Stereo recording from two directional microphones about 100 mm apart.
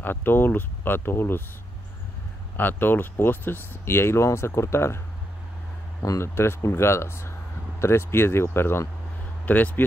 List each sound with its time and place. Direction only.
0.0 s speech: 20° left (ahead or behind)
2.5 s speech: 20° left (ahead or behind)
6.0 s speech: 25° left (ahead or behind)